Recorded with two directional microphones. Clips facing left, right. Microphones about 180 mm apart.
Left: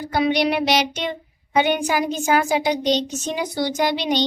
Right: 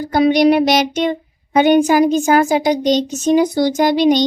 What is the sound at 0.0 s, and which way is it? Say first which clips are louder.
A woman's voice: right 7 dB; 45° right (ahead or behind).